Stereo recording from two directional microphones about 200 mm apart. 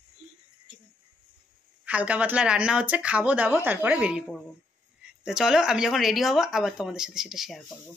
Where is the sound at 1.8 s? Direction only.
5° right (ahead or behind).